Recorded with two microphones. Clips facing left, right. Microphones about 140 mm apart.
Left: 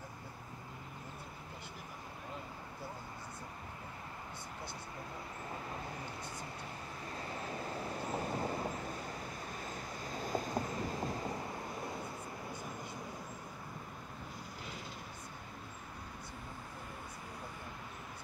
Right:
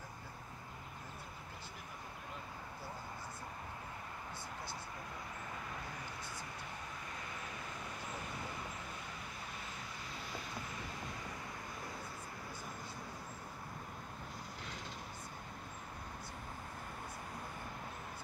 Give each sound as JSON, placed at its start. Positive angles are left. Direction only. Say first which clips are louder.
{"t": 7.2, "sound": "vehicle", "louder": "left 5 dB", "side_deg": 35}